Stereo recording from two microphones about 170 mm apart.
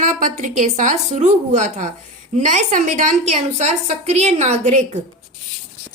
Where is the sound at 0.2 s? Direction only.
45° right (ahead or behind).